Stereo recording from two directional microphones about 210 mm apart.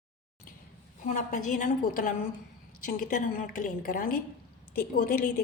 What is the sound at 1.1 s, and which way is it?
A woman's voice, 35° left (ahead or behind).